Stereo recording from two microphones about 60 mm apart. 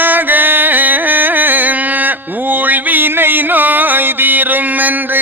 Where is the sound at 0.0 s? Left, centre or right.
Right.